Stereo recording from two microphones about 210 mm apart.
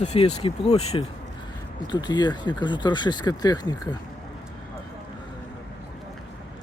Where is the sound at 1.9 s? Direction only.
20° left (ahead or behind).